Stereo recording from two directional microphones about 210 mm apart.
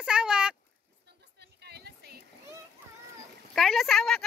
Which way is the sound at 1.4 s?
50° right (ahead or behind).